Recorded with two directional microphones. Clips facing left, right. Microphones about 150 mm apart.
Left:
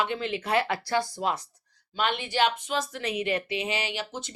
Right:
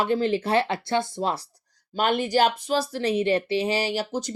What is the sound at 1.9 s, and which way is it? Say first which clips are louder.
A woman's voice: right 6 dB; 40° right (ahead or behind).